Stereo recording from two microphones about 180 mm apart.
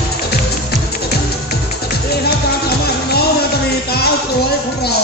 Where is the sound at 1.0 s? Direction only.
60° left (ahead or behind).